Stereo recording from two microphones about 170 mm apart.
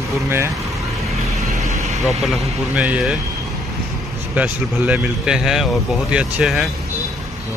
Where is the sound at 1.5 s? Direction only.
40° right (ahead or behind).